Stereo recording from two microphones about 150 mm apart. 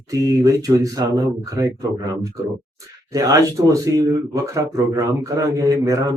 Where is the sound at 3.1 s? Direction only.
20° right (ahead or behind).